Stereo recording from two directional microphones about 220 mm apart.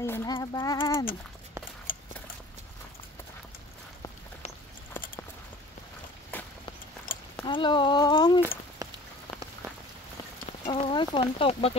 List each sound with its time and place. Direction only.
0.0 s speech: 10° left (ahead or behind)
1.9 s a sound: 40° left (ahead or behind)
6.3 s walk: 10° left (ahead or behind)
7.1 s a sound: 40° left (ahead or behind)
7.4 s speech: 20° left (ahead or behind)
10.7 s speech: 20° left (ahead or behind)